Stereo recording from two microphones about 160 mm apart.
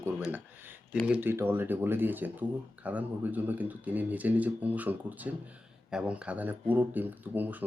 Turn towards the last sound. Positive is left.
turn(degrees=-10)  # may be behind; listen again after turning